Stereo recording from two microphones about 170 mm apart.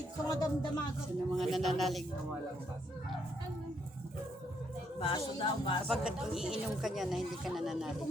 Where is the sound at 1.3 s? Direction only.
Centre (ahead or behind).